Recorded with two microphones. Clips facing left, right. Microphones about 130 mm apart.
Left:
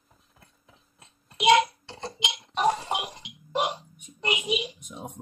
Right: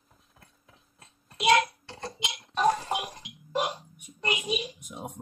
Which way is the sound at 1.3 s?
20° left (ahead or behind).